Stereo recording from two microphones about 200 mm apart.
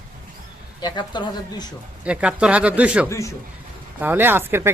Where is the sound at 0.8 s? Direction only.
20° left (ahead or behind).